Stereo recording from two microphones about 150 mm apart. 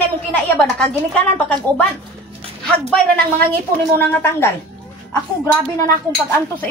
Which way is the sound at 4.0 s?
15° left (ahead or behind).